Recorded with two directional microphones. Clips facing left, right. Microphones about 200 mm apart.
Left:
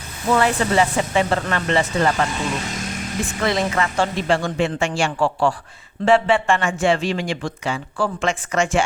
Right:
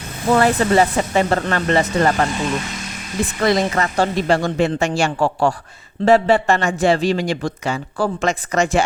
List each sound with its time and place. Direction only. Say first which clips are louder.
0.3 s a man's voice: right 3 dB; 40° right (ahead or behind)
3.4 s a man's voice: right 3 dB; 40° right (ahead or behind)